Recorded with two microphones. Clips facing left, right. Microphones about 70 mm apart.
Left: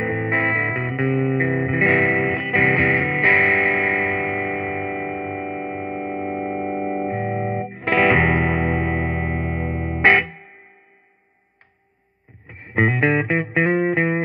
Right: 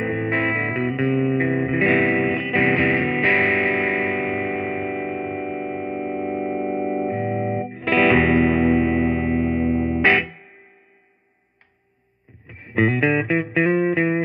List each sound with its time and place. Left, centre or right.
0.0 s music: left
7.1 s music: left
7.7 s music: left
12.4 s music: left